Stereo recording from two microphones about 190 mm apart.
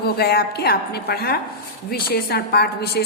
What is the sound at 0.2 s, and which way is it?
A woman's voice, 60° left (ahead or behind).